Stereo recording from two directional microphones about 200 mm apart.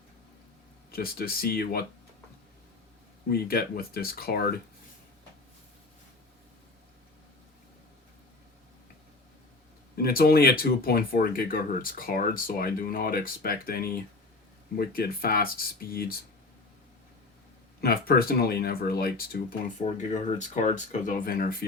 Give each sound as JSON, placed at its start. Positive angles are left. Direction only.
{"t": 0.9, "sound": "speech", "side_deg": 50}
{"t": 3.2, "sound": "speech", "side_deg": 50}
{"t": 10.0, "sound": "speech", "side_deg": 50}
{"t": 17.7, "sound": "speech", "side_deg": 50}
{"t": 19.8, "sound": "speech", "side_deg": 35}